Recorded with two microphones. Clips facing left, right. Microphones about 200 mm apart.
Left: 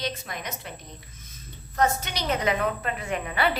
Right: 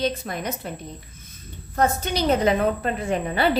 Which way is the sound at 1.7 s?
30° right (ahead or behind).